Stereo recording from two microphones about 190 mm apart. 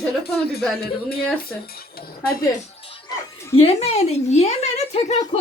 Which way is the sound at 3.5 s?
30° left (ahead or behind).